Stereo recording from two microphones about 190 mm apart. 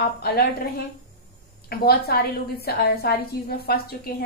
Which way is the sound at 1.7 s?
55° left (ahead or behind).